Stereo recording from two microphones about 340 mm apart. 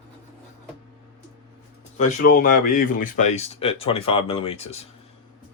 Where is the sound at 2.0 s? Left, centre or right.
Left.